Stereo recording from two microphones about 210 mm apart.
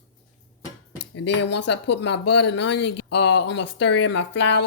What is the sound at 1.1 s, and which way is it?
Speech, 55° left (ahead or behind).